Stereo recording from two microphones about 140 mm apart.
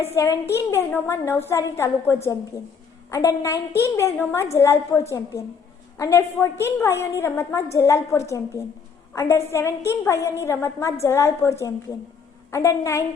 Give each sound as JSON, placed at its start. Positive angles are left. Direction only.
{"t": 0.2, "sound": "a woman's voice", "side_deg": 20}